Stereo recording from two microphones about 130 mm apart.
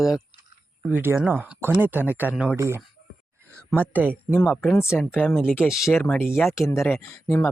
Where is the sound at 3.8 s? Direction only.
15° right (ahead or behind).